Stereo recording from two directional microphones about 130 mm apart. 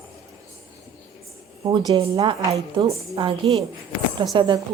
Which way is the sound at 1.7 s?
35° right (ahead or behind).